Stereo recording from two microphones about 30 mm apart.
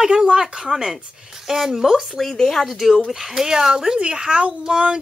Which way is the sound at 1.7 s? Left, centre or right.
Centre.